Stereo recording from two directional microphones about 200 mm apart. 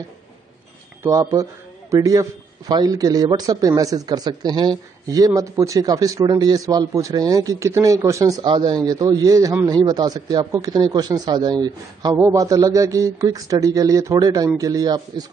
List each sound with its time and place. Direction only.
1.0 s speech: 15° right (ahead or behind)